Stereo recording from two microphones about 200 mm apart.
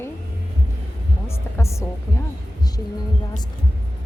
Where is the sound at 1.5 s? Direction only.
15° left (ahead or behind).